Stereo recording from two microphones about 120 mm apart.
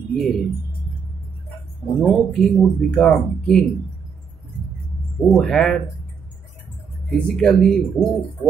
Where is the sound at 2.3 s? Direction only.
Centre (ahead or behind).